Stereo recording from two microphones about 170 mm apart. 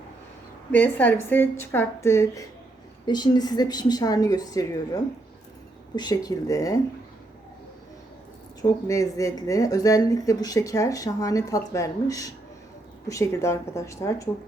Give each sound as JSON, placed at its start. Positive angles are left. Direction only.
{"t": 0.7, "sound": "a woman's voice", "side_deg": 10}
{"t": 8.6, "sound": "a woman's voice", "side_deg": 20}